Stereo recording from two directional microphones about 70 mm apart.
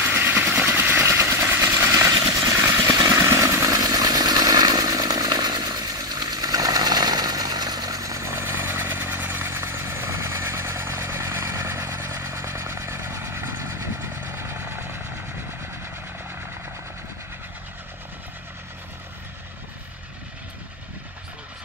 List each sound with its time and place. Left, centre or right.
0.1 s vehicle: right
3.9 s chainsaw: right